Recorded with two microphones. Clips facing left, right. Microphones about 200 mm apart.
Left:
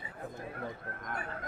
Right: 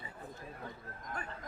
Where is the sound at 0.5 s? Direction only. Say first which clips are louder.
Left 6 dB; 65° left (ahead or behind).